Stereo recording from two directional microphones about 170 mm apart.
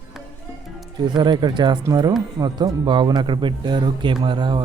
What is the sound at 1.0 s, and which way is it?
Speech, 25° right (ahead or behind).